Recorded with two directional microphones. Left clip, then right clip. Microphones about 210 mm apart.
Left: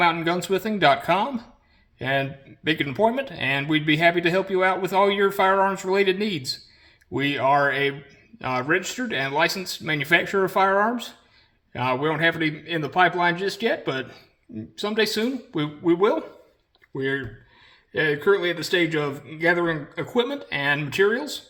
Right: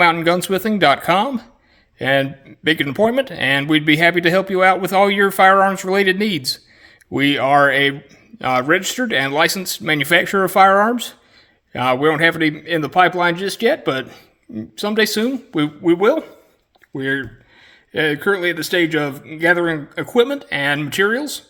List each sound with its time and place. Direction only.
0.0 s speech: 45° right (ahead or behind)